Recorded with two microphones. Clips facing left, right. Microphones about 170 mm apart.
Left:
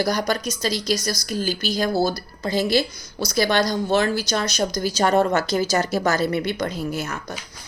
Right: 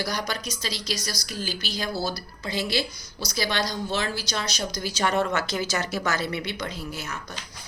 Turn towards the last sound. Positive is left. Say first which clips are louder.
# left 7 dB
turn(degrees=50)  # may be behind; listen again after turning